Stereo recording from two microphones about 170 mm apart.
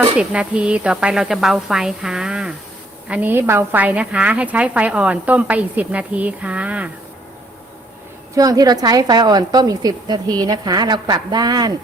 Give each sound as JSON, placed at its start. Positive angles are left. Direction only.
{"t": 0.2, "sound": "a woman's voice", "side_deg": -5}
{"t": 8.4, "sound": "a woman's voice", "side_deg": -20}